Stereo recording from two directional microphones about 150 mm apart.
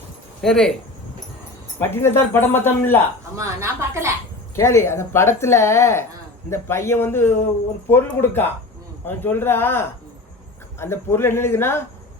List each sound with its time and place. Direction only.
0.4 s speech: 5° left (ahead or behind)
1.8 s speech: 15° left (ahead or behind)
3.3 s speech: 20° right (ahead or behind)
4.5 s speech: 20° left (ahead or behind)